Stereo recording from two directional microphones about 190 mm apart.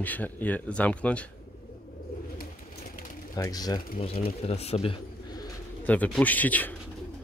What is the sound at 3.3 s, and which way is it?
Speech, 20° left (ahead or behind).